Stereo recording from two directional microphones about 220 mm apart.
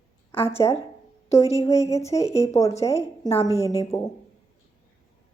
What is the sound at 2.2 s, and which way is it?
Speech, 30° left (ahead or behind).